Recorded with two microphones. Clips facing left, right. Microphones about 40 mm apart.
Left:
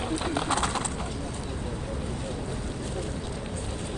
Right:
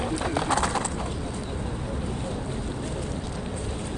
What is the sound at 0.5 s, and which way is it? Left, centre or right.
Horse, left.